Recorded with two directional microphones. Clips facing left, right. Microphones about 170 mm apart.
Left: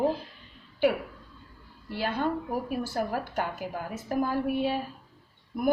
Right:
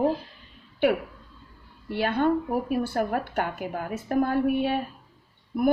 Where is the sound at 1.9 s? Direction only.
60° right (ahead or behind).